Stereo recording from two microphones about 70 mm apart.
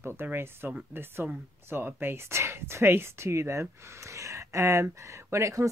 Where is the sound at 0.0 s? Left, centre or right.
Right.